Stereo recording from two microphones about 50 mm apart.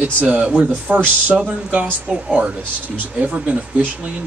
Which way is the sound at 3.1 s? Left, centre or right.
Right.